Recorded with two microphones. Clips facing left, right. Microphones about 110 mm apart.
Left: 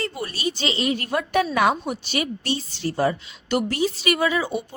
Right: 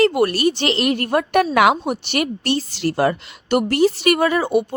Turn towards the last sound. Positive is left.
turn(degrees=-60)  # may be behind; listen again after turning